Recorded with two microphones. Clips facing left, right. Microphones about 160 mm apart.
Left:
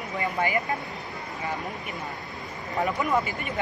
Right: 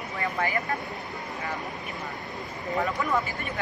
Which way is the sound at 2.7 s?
20° left (ahead or behind).